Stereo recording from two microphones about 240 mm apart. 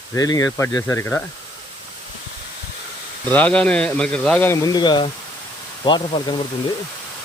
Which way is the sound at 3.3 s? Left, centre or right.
Centre.